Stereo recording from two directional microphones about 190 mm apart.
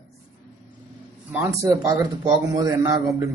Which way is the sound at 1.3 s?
15° right (ahead or behind).